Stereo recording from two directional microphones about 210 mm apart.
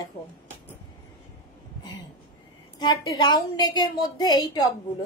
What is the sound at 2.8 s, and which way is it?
A woman's voice, 20° left (ahead or behind).